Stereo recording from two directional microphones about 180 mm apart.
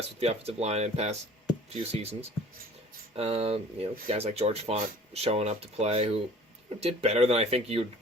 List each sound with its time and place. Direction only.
0.2 s speech: 35° right (ahead or behind)
3.2 s speech: 35° right (ahead or behind)